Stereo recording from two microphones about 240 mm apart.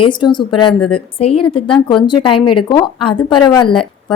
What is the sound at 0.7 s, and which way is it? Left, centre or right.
Speech, left.